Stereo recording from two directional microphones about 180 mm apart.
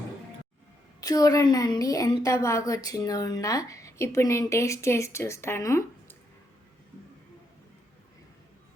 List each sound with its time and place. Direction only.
1.0 s a woman's voice: 20° left (ahead or behind)